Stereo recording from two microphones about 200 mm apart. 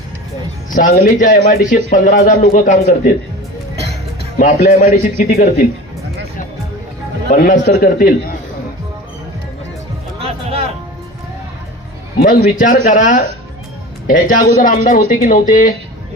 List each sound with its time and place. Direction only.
0.7 s a man's voice: 40° left (ahead or behind)
4.4 s speech: 40° left (ahead or behind)
7.3 s a man's voice: 40° left (ahead or behind)
10.2 s music: 30° right (ahead or behind)
12.2 s speech: 40° left (ahead or behind)